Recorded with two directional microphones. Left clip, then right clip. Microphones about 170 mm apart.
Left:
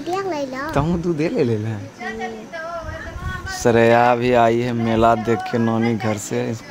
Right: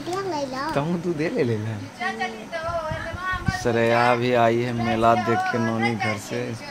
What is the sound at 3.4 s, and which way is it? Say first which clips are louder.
Speech: left 8 dB; 90° left.